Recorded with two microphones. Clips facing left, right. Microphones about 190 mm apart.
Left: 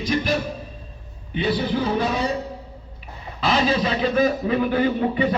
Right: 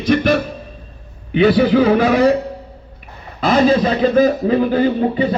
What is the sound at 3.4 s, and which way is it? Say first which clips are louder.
A man's voice: right 7 dB; 50° right (ahead or behind).